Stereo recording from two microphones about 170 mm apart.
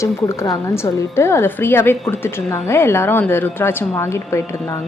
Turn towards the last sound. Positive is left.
turn(degrees=15)  # may be behind; listen again after turning